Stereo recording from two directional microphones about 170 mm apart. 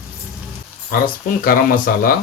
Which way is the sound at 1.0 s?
55° left (ahead or behind).